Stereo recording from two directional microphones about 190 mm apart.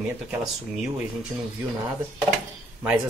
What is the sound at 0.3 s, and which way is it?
Speech, 5° right (ahead or behind).